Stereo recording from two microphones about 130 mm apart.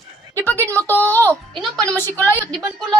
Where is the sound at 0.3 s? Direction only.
15° left (ahead or behind).